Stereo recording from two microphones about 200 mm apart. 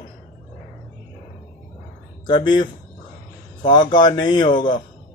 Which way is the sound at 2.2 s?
20° left (ahead or behind).